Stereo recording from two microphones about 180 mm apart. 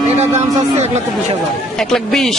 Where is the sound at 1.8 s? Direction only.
5° left (ahead or behind).